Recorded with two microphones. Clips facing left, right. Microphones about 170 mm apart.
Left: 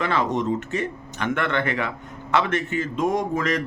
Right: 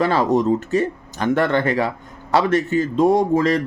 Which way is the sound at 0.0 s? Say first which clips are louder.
Right 6 dB; 35° right (ahead or behind).